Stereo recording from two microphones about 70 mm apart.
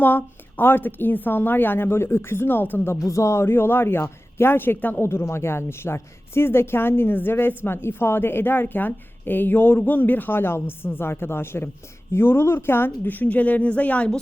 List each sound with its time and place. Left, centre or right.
0.0 s a woman's voice: left
3.0 s a woman's voice: left
5.0 s a woman's voice: left; by 14.2 s centre